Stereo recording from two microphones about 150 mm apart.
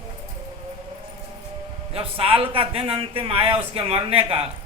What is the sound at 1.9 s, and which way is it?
A man's voice, 40° right (ahead or behind).